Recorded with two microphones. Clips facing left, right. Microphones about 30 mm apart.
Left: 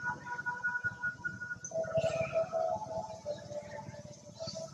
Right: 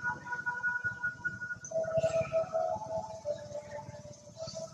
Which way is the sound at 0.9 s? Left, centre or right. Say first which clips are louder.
Right 2 dB; centre.